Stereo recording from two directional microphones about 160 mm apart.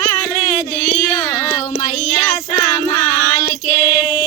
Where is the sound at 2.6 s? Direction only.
25° left (ahead or behind).